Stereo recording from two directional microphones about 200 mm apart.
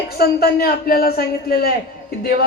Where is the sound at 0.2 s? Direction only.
50° left (ahead or behind).